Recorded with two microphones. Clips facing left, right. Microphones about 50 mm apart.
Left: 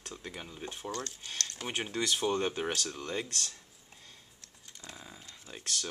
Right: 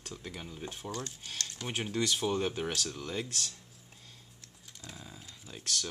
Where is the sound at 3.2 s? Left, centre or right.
Centre.